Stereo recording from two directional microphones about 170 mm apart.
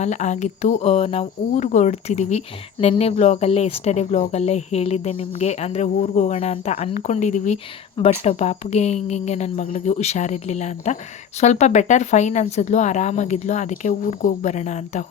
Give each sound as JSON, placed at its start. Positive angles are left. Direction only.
{"t": 0.0, "sound": "speech", "side_deg": 40}